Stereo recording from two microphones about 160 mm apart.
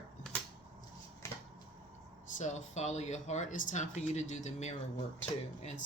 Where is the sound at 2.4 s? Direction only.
45° left (ahead or behind).